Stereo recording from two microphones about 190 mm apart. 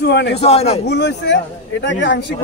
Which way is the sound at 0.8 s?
65° left (ahead or behind).